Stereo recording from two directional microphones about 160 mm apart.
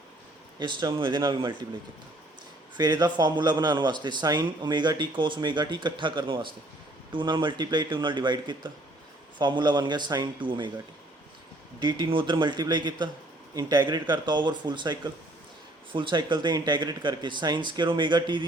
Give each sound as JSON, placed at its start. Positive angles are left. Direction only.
{"t": 0.6, "sound": "a man's voice", "side_deg": -30}
{"t": 2.7, "sound": "a man's voice", "side_deg": -25}
{"t": 11.8, "sound": "a man's voice", "side_deg": -30}